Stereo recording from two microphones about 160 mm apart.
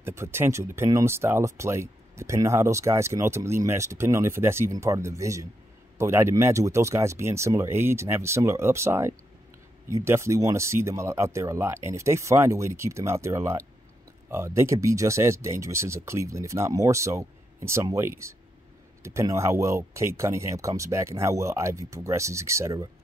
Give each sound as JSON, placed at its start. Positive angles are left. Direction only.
{"t": 0.0, "sound": "speech", "side_deg": -15}